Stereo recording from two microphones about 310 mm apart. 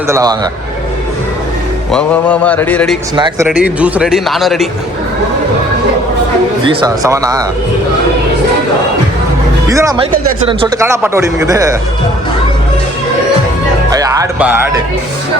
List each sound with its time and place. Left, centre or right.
0.1 s speech: centre
1.9 s speech: centre
3.2 s speech: centre
3.5 s speech: centre
6.7 s speech: centre
9.6 s speech: centre
13.9 s music: centre